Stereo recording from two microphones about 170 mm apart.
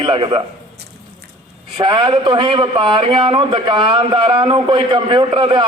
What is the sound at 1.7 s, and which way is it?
A man's voice, 30° right (ahead or behind).